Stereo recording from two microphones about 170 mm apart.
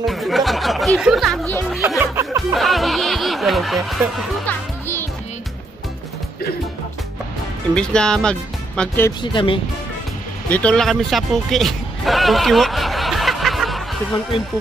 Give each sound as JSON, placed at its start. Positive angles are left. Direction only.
{"t": 0.0, "sound": "speech", "side_deg": 0}
{"t": 2.0, "sound": "music", "side_deg": -15}
{"t": 2.5, "sound": "snicker", "side_deg": 0}
{"t": 4.5, "sound": "music", "side_deg": 15}
{"t": 7.7, "sound": "speech", "side_deg": 5}
{"t": 9.2, "sound": "speech", "side_deg": 30}
{"t": 10.5, "sound": "music", "side_deg": 5}